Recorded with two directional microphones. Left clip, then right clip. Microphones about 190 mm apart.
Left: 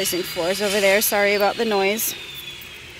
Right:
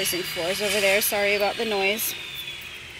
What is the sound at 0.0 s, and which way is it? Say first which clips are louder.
Speech: left 3 dB; 30° left (ahead or behind).